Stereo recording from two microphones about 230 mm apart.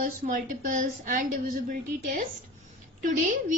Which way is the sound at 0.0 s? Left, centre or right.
Right.